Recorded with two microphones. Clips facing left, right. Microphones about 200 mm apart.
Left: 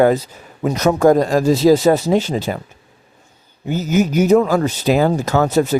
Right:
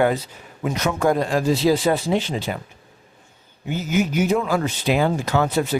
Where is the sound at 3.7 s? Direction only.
40° left (ahead or behind).